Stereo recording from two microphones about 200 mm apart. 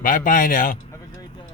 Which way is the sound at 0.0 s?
40° left (ahead or behind).